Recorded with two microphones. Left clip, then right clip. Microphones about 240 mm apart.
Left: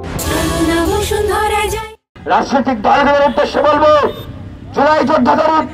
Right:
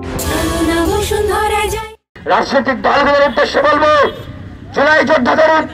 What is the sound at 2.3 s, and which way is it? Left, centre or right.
A man's voice, right.